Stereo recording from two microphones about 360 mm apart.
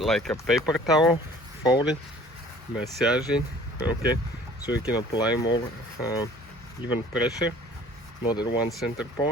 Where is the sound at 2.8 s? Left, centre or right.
Centre.